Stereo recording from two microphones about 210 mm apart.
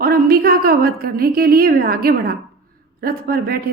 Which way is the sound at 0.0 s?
45° right (ahead or behind).